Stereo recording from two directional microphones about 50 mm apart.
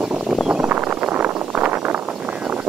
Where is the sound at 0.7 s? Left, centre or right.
Right.